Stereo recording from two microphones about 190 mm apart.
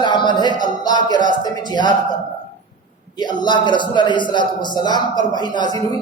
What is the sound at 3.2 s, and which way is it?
A man's voice, 25° left (ahead or behind).